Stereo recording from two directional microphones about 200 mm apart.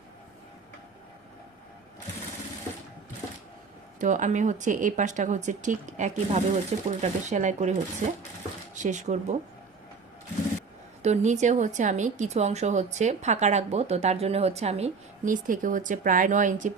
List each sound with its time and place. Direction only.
4.0 s speech: 40° right (ahead or behind)
11.0 s speech: 35° right (ahead or behind)